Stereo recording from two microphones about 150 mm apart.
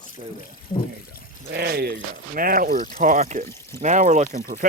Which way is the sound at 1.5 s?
90° right.